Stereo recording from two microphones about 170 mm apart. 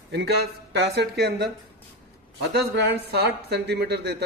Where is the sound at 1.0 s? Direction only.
80° right.